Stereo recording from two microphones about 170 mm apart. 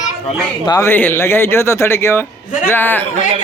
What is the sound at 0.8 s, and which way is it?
A man's voice, 10° left (ahead or behind).